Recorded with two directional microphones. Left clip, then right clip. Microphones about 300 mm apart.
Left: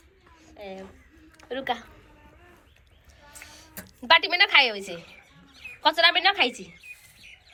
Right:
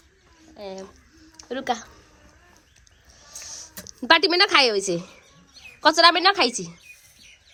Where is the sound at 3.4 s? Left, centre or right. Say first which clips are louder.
Right 6 dB; centre.